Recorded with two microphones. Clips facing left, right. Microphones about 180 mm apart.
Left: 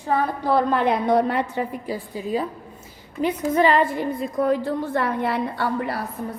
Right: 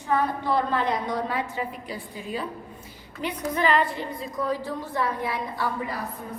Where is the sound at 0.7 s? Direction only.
60° left (ahead or behind).